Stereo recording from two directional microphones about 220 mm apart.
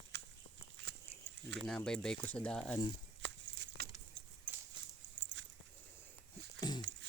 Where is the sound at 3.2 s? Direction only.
55° right (ahead or behind).